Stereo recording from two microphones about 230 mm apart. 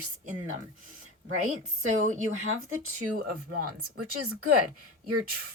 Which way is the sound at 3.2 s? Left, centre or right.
Right.